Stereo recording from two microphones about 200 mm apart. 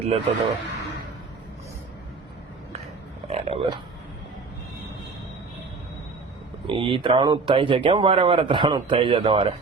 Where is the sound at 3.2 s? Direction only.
25° right (ahead or behind).